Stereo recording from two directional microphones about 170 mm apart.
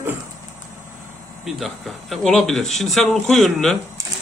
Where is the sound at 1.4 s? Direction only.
Centre (ahead or behind).